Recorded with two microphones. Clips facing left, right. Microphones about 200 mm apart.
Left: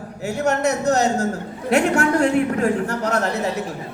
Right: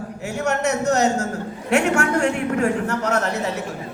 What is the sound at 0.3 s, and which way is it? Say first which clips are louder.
Speech: left 2 dB; 35° left (ahead or behind).